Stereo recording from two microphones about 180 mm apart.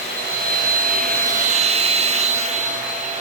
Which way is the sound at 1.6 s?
35° right (ahead or behind).